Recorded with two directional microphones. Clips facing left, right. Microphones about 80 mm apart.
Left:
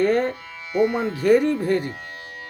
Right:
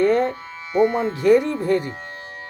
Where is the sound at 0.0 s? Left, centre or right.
Left.